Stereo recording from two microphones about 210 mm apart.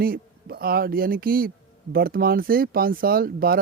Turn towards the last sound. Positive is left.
turn(degrees=-45)  # may be behind; listen again after turning